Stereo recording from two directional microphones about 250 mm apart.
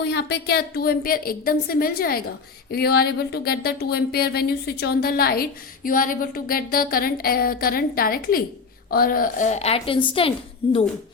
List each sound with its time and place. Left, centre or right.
0.0 s speech: left